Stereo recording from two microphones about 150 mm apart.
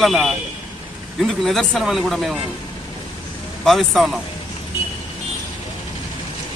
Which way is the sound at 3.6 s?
Centre (ahead or behind).